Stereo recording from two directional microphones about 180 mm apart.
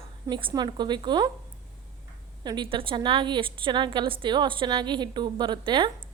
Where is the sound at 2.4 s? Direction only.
25° right (ahead or behind).